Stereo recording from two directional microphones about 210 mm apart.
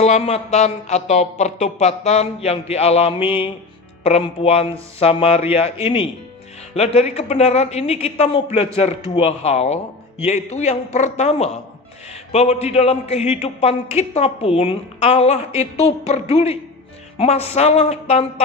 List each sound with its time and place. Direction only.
0.0 s a man's voice: 30° left (ahead or behind)